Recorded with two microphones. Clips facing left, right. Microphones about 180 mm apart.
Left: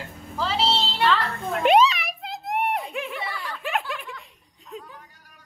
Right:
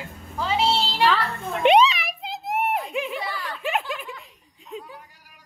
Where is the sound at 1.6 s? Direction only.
Centre (ahead or behind).